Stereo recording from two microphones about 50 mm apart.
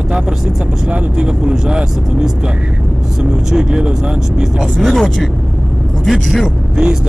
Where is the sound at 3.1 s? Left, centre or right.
Centre.